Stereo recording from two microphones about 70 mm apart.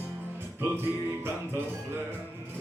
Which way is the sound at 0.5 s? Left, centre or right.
Right.